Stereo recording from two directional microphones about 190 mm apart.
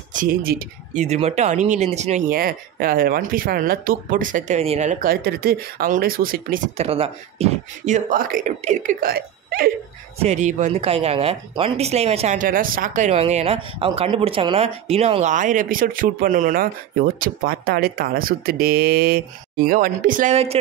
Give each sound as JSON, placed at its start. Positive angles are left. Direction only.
{"t": 0.1, "sound": "speech", "side_deg": -45}
{"t": 6.8, "sound": "speech", "side_deg": -30}
{"t": 10.1, "sound": "speech", "side_deg": -35}